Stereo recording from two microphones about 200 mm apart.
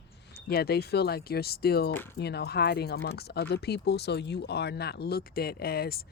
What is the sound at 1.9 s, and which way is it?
Speech, 10° left (ahead or behind).